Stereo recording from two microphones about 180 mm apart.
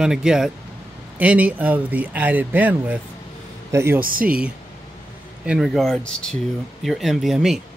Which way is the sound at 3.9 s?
50° right (ahead or behind).